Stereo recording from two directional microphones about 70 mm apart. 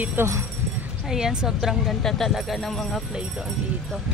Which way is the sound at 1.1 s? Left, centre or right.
Centre.